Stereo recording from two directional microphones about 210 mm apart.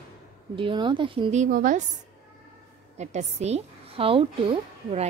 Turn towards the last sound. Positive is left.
turn(degrees=-25)  # may be behind; listen again after turning